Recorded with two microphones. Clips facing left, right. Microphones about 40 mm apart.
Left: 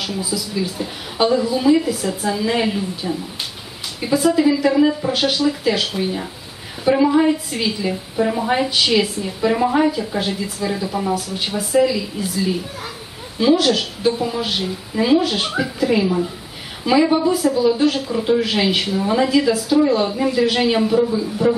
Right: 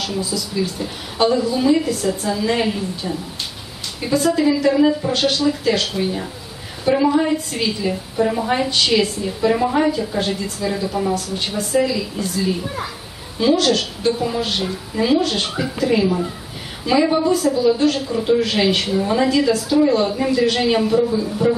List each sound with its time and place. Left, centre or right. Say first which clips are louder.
0.0 s a woman's voice: right 1 dB; centre